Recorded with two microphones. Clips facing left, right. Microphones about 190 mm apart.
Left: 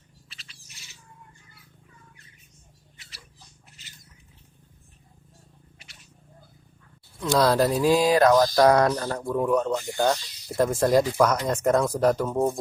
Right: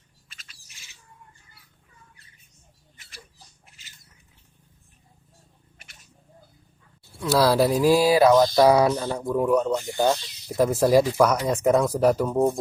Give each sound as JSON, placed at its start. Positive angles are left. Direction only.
{"t": 0.3, "sound": "bird", "side_deg": -50}
{"t": 7.2, "sound": "speech", "side_deg": -5}